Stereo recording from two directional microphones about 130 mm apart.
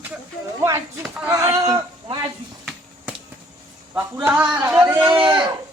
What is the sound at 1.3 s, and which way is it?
Speech, 25° right (ahead or behind).